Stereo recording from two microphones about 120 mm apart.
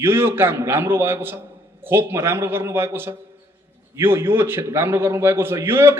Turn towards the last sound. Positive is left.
turn(degrees=-20)  # may be behind; listen again after turning